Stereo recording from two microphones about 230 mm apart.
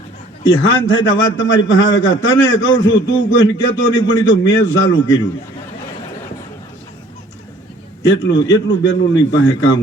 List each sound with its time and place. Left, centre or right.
0.4 s a man's voice: left
8.0 s a man's voice: left